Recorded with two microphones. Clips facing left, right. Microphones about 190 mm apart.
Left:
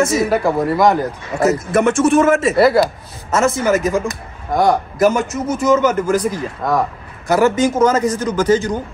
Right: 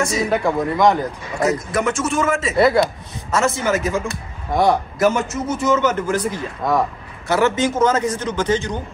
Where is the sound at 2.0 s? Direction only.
60° left (ahead or behind).